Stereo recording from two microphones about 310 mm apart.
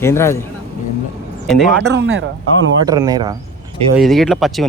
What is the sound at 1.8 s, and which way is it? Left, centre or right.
Speech, right.